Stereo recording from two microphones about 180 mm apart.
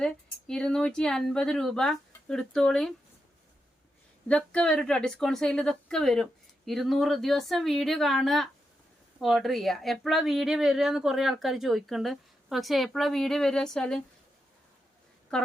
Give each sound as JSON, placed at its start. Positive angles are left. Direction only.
{"t": 0.0, "sound": "a woman's voice", "side_deg": 5}
{"t": 4.3, "sound": "a woman's voice", "side_deg": 5}
{"t": 15.3, "sound": "a woman's voice", "side_deg": 5}